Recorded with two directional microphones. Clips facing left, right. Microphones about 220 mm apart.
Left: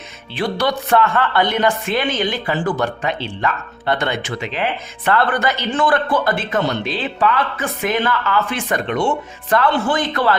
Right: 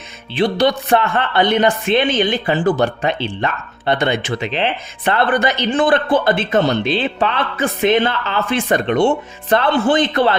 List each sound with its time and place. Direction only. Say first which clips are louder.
0.3 s a woman's voice: right 4 dB; 20° right (ahead or behind)